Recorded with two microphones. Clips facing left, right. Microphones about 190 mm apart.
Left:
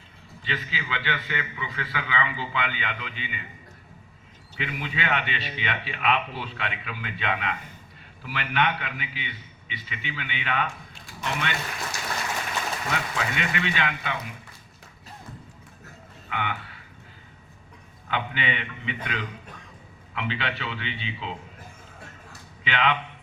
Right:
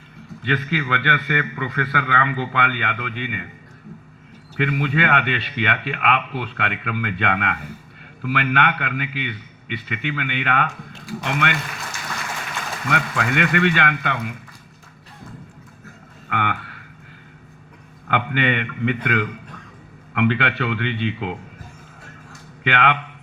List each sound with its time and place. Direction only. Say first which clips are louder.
0.4 s speech: right 10 dB; 55° right (ahead or behind)
4.5 s speech: right 11 dB; 55° right (ahead or behind)
12.9 s speech: right 9 dB; 60° right (ahead or behind)
16.3 s a sound: right 6 dB; 60° right (ahead or behind)
18.1 s speech: right 8 dB; 60° right (ahead or behind)
22.6 s speech: right 5 dB; 55° right (ahead or behind)